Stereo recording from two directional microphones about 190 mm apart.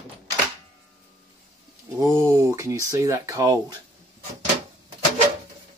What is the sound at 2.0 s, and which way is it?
Speech, 20° right (ahead or behind).